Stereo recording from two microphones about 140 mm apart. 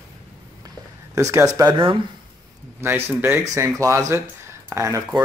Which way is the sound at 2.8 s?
15° right (ahead or behind).